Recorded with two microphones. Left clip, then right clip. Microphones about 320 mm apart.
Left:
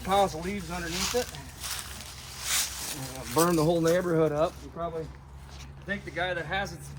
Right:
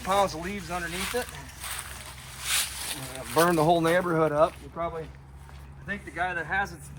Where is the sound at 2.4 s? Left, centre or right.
Centre.